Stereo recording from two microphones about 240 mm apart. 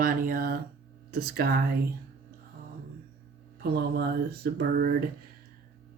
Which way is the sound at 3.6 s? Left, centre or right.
Right.